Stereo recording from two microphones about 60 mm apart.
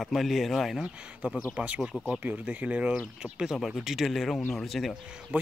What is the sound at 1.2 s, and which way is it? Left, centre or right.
Speech, right.